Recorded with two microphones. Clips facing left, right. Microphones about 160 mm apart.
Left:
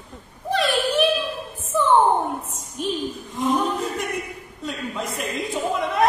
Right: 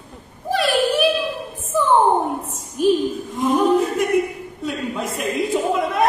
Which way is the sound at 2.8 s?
5° right (ahead or behind).